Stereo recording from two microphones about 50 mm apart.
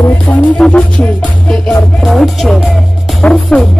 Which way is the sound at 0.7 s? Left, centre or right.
Left.